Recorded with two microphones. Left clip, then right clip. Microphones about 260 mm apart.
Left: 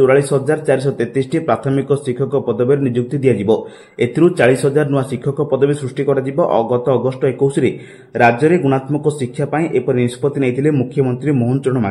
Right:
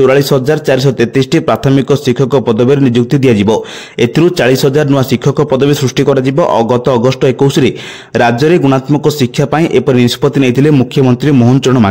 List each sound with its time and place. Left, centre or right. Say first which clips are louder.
0.0 s a man's voice: right 4 dB; right